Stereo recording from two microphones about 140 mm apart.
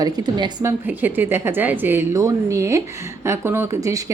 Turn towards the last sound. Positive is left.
turn(degrees=-25)  # may be behind; listen again after turning